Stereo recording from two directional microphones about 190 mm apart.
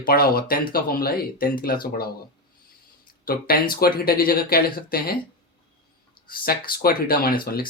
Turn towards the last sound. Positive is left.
turn(degrees=50)  # may be behind; listen again after turning